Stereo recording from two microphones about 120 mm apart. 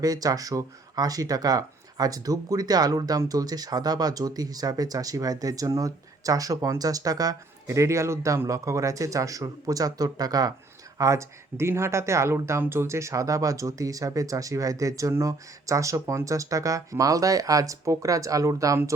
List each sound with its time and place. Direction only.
0.0 s speech: 30° right (ahead or behind)